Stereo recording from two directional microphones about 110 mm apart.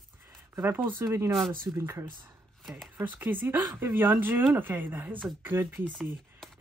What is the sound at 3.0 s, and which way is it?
Speech, 15° right (ahead or behind).